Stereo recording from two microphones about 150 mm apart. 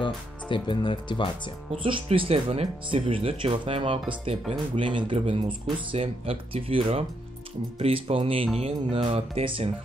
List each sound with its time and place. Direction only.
0.0 s speech: 35° left (ahead or behind)
1.7 s speech: 35° right (ahead or behind)